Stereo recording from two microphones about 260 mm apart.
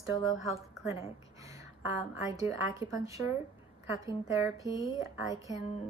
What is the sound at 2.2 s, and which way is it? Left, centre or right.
A woman's voice, centre.